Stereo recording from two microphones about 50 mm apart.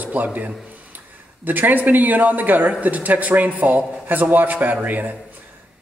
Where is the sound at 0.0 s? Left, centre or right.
Right.